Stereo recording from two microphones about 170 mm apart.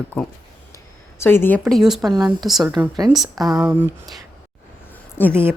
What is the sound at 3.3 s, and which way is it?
Speech, 20° right (ahead or behind).